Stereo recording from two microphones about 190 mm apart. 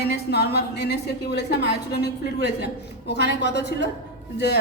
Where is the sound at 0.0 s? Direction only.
60° left (ahead or behind).